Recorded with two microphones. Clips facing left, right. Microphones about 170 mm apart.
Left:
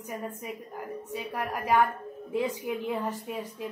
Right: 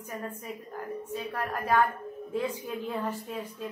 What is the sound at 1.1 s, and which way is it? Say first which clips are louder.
A woman's voice: left 1 dB; 15° left (ahead or behind).